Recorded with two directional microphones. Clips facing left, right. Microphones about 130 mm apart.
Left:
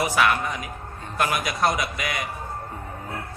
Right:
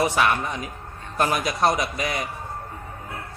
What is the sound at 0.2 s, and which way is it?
A man's voice, 30° right (ahead or behind).